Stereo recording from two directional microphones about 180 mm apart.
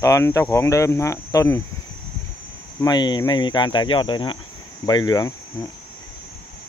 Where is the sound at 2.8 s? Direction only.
25° left (ahead or behind).